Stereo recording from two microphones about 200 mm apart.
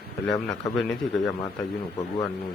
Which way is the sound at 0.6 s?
5° left (ahead or behind).